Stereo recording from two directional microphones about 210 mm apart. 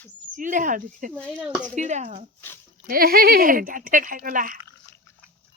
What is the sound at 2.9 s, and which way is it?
Speech, 45° right (ahead or behind).